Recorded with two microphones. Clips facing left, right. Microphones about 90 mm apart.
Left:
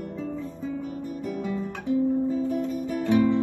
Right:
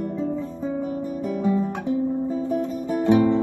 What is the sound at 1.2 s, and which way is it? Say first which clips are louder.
Guitar: right 8 dB; 30° right (ahead or behind).